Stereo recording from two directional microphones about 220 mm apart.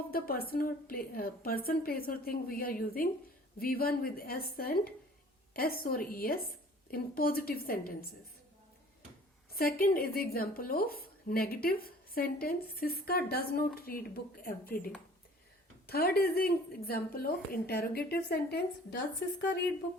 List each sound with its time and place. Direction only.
0.1 s speech: 40° left (ahead or behind)
9.5 s speech: 45° left (ahead or behind)
15.9 s speech: 45° left (ahead or behind)